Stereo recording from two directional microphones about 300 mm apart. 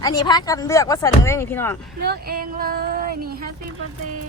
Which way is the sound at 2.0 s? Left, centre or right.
Right.